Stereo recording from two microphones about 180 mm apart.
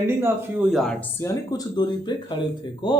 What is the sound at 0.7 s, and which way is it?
Speech, centre (ahead or behind).